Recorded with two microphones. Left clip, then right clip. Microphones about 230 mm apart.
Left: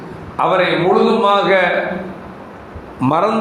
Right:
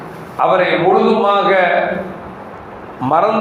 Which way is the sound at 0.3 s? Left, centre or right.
Left.